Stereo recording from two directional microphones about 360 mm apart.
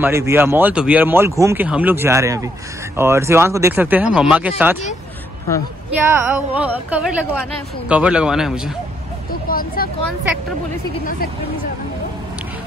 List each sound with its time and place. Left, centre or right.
0.0 s speech: centre
5.9 s speech: centre
9.5 s speech: left